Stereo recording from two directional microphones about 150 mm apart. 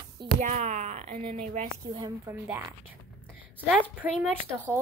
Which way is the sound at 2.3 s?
15° right (ahead or behind).